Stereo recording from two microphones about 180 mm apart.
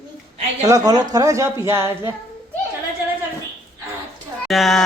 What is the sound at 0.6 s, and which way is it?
Speech, 20° right (ahead or behind).